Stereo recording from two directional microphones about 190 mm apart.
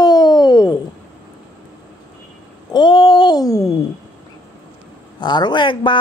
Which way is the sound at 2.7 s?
25° left (ahead or behind).